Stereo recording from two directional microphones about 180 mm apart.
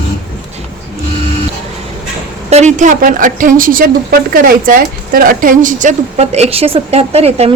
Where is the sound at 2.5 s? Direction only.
40° right (ahead or behind).